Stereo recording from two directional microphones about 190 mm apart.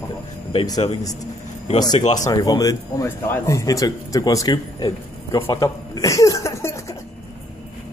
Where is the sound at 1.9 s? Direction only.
40° left (ahead or behind).